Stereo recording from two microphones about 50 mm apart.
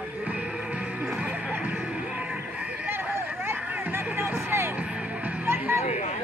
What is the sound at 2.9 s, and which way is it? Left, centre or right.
Music, right.